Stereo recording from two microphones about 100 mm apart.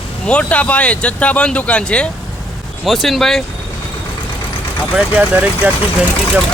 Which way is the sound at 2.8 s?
Centre (ahead or behind).